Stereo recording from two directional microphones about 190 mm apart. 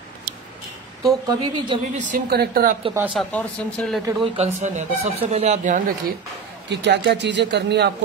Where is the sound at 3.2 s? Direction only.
5° left (ahead or behind).